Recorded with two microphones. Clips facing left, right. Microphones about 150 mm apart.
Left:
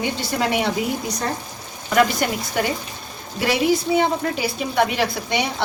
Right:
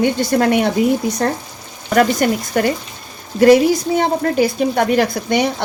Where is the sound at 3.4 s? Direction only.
45° right (ahead or behind).